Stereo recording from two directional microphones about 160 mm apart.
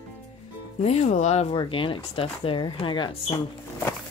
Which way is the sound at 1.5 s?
30° left (ahead or behind).